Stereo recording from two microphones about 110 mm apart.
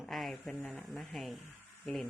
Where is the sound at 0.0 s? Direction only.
Centre (ahead or behind).